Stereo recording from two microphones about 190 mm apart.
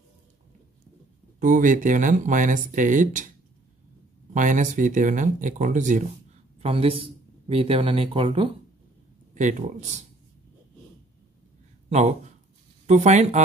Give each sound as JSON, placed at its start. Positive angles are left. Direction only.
{"t": 1.4, "sound": "speech", "side_deg": -45}
{"t": 4.3, "sound": "speech", "side_deg": -40}
{"t": 6.6, "sound": "a man's voice", "side_deg": -30}
{"t": 9.3, "sound": "speech", "side_deg": -40}
{"t": 11.9, "sound": "speech", "side_deg": -35}